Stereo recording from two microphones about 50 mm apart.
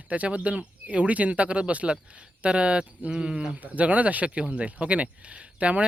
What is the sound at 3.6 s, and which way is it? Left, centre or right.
Speech, right.